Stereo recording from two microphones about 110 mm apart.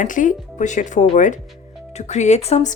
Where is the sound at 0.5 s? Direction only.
90° left; by 2.6 s 70° left (ahead or behind).